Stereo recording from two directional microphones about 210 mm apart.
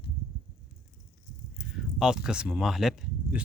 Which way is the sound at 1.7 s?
5° right (ahead or behind).